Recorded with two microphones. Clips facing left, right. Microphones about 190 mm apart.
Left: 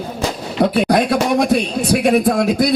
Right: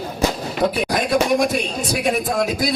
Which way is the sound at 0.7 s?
65° left (ahead or behind).